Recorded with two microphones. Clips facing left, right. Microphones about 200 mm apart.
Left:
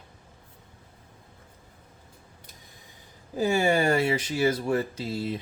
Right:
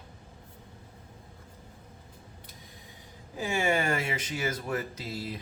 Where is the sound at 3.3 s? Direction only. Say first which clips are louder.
Left 5 dB; 35° left (ahead or behind).